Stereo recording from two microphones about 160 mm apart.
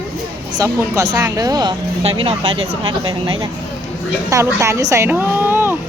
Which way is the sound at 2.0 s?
35° right (ahead or behind).